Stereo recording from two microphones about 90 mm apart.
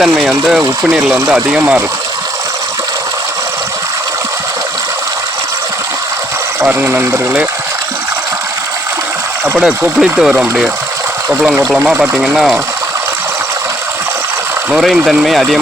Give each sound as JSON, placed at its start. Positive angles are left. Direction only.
{"t": 0.0, "sound": "speech", "side_deg": -5}
{"t": 6.7, "sound": "speech", "side_deg": -20}
{"t": 9.4, "sound": "speech", "side_deg": -15}
{"t": 12.2, "sound": "speech", "side_deg": -5}
{"t": 14.8, "sound": "speech", "side_deg": 0}